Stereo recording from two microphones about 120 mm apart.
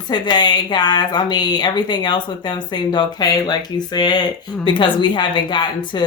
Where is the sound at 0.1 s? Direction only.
40° left (ahead or behind).